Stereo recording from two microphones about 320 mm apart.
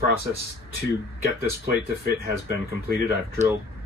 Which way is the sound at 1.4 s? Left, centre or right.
Right.